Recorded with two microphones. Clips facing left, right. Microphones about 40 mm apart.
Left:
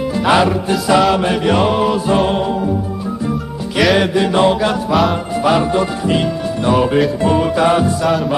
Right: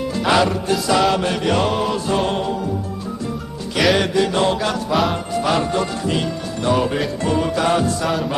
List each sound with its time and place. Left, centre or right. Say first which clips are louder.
0.3 s music: left 3 dB; centre
3.8 s music: left 3 dB; centre
4.0 s mantra: left 4 dB; centre
4.9 s music: left 4 dB; centre
5.4 s music: left 5 dB; centre